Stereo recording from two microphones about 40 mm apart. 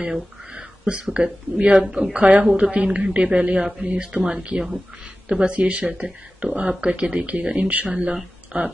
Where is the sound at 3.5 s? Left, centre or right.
Centre.